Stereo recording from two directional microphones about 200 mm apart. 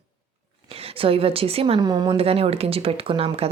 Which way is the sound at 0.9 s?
30° right (ahead or behind).